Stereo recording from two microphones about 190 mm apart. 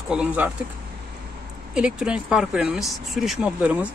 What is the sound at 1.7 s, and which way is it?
Speech, 5° right (ahead or behind).